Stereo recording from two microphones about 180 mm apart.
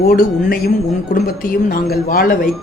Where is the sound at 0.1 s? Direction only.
55° left (ahead or behind).